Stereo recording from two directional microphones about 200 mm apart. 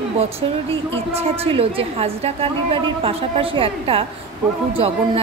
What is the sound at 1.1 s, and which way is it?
A woman's voice, 30° right (ahead or behind).